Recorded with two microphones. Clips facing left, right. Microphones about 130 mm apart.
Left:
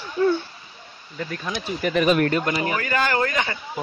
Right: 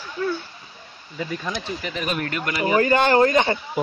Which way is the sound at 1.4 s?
5° left (ahead or behind).